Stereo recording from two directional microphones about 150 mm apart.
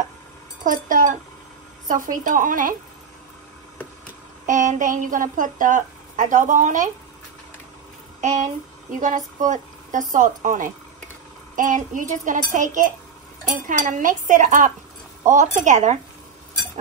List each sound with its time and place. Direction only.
0.7 s a sound: 65° right (ahead or behind)
1.9 s a woman's voice: 60° right (ahead or behind)
4.5 s a woman's voice: 60° right (ahead or behind)
8.2 s a woman's voice: 55° right (ahead or behind)